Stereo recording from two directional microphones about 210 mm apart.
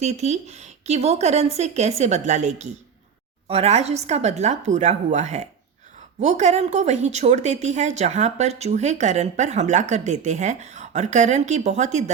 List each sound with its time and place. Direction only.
0.0 s a woman's voice: 30° right (ahead or behind)